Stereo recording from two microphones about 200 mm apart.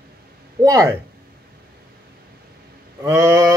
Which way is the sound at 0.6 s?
15° right (ahead or behind).